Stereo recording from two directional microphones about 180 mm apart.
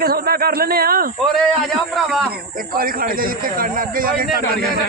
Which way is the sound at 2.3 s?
55° right (ahead or behind).